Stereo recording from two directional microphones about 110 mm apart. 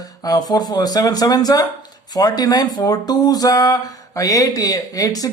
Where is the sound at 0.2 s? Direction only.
35° left (ahead or behind).